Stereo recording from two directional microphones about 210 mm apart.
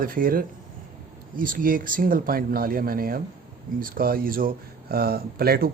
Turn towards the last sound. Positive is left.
turn(degrees=-45)  # may be behind; listen again after turning